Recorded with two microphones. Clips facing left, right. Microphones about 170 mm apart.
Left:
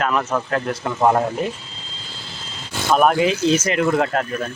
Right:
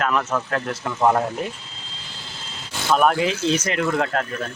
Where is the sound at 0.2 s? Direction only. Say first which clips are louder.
Left 2 dB; 15° left (ahead or behind).